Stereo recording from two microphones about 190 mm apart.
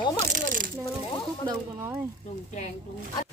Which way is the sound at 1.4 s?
10° right (ahead or behind).